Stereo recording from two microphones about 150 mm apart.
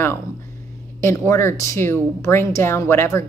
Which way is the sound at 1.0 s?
15° left (ahead or behind).